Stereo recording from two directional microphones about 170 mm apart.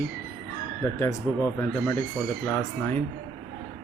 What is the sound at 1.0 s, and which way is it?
Speech, 15° left (ahead or behind).